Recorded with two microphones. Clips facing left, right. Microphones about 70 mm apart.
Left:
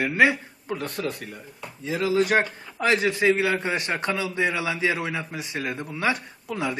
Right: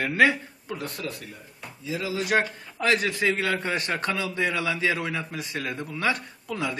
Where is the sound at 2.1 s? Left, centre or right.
Left.